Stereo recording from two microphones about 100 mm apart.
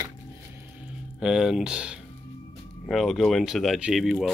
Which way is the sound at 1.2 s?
5° right (ahead or behind).